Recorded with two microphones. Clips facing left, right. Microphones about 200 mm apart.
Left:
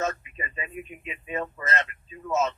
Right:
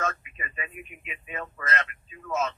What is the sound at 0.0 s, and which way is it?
Speech, 30° left (ahead or behind).